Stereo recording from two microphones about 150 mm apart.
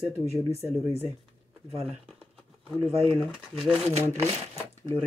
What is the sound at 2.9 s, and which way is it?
Speech, 40° right (ahead or behind).